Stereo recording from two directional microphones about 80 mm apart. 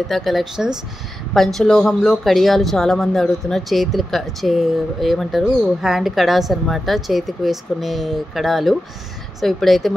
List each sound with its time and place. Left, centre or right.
0.1 s speech: centre